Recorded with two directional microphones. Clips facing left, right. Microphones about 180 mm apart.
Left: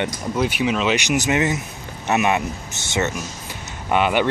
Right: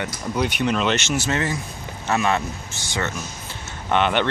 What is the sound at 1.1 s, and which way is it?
Speech, 15° left (ahead or behind).